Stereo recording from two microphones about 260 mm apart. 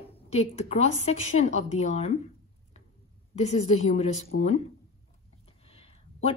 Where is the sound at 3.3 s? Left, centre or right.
Left.